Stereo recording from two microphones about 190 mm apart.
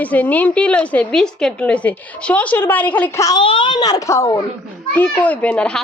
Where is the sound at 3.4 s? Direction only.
25° left (ahead or behind); by 5.8 s 5° left (ahead or behind).